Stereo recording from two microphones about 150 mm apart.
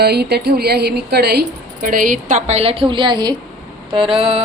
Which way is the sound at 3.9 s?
35° right (ahead or behind).